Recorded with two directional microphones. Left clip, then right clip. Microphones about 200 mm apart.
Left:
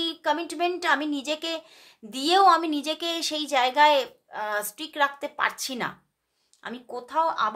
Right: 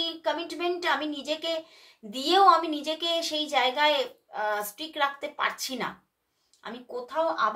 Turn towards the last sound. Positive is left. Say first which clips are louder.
# left 2 dB
turn(degrees=45)  # may be behind; listen again after turning